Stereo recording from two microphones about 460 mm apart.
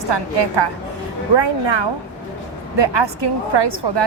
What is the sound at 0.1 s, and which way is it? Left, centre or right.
A woman's voice, right.